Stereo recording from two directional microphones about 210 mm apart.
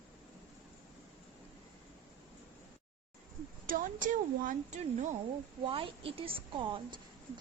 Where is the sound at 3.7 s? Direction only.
40° right (ahead or behind).